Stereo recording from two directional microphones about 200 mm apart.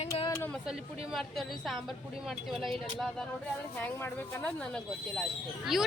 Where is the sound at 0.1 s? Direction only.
15° left (ahead or behind).